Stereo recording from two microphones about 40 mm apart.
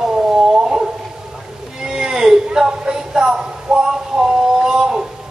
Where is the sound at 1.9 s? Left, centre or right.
Centre.